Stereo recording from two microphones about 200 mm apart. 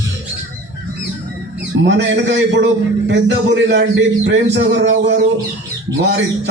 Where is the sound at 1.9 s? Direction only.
65° right (ahead or behind).